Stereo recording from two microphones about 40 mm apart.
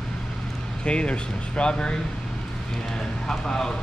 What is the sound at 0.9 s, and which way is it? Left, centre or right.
Speech, left.